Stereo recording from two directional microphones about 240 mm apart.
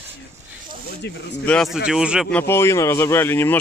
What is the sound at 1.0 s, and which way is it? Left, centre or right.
Speech, left.